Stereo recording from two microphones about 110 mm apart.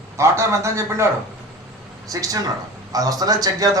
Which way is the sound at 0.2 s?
25° right (ahead or behind).